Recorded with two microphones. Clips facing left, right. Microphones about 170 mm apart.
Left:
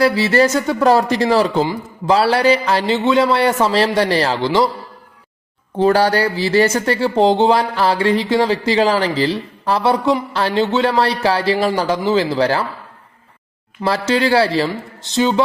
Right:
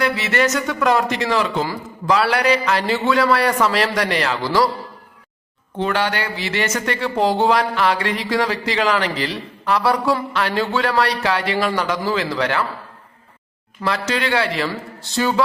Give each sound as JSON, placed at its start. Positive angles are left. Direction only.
{"t": 0.0, "sound": "a man's voice", "side_deg": 30}
{"t": 5.7, "sound": "speech", "side_deg": 35}
{"t": 13.8, "sound": "speech", "side_deg": 30}
{"t": 14.7, "sound": "a man's voice", "side_deg": 20}